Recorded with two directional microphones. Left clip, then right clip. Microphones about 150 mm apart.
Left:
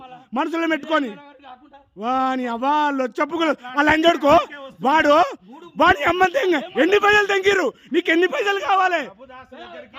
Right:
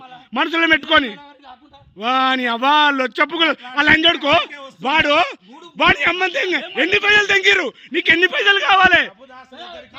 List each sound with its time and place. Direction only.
0.3 s a man's voice: 10° left (ahead or behind); by 4.0 s 25° left (ahead or behind)
4.0 s a man's voice: 40° left (ahead or behind)
7.6 s a man's voice: 45° left (ahead or behind)
8.1 s a man's voice: 15° left (ahead or behind)